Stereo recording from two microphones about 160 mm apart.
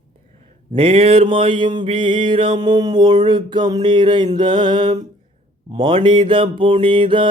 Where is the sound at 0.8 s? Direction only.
35° right (ahead or behind).